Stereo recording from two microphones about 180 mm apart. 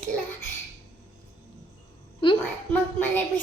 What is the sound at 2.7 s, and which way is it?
Speech, 10° left (ahead or behind).